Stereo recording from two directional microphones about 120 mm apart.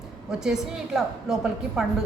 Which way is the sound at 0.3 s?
5° right (ahead or behind).